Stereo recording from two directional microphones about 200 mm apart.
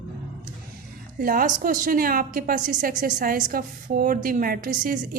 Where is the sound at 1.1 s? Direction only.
45° right (ahead or behind).